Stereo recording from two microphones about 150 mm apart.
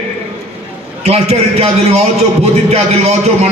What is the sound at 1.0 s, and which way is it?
A man's voice, 45° right (ahead or behind).